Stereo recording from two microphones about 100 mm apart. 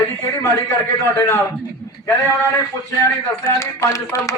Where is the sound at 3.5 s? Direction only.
30° left (ahead or behind).